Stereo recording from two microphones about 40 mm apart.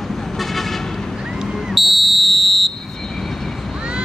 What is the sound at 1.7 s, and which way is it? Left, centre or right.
Fire alarm, centre.